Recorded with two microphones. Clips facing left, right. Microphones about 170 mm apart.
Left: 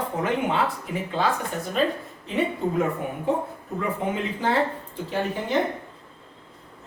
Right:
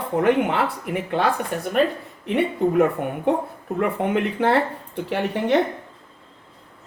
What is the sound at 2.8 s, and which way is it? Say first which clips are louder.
Speech: right 6 dB; 65° right (ahead or behind).